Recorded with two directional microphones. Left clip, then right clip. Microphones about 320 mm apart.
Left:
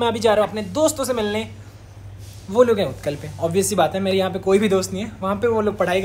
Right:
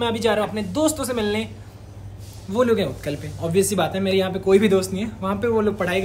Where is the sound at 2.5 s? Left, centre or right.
Centre.